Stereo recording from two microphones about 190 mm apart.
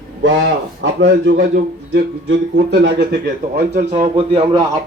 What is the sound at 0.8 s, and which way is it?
Speech, 85° right.